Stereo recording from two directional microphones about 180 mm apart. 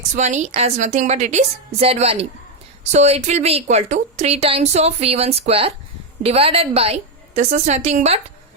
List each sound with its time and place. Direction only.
0.2 s a woman's voice: 40° right (ahead or behind)